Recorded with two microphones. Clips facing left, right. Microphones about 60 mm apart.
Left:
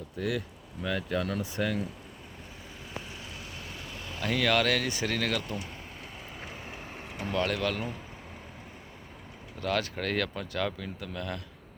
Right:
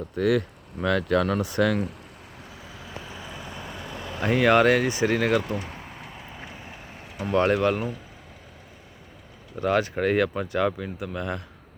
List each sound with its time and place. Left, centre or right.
0.2 s speech: right
4.2 s speech: right
5.5 s a sound: right
6.1 s vehicle: centre
7.3 s speech: right
9.6 s speech: right